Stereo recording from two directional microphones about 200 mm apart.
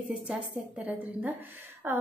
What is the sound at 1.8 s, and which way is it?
Speech, 10° right (ahead or behind).